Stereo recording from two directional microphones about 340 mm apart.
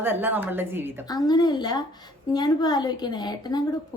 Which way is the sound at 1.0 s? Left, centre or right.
Centre.